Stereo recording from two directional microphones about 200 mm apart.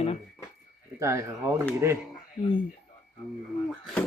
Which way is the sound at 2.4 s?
25° left (ahead or behind).